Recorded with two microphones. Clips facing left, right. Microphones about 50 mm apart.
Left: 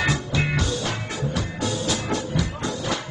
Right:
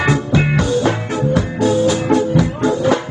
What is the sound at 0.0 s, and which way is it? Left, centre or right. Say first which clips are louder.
Music: right 8 dB; right.